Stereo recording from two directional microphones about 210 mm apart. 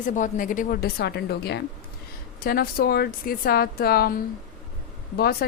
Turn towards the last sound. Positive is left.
turn(degrees=50)  # may be behind; listen again after turning